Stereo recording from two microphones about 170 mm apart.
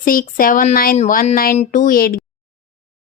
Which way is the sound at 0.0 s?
55° left (ahead or behind).